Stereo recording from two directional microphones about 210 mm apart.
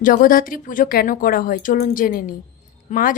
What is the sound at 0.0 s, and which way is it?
A man's voice, 40° left (ahead or behind).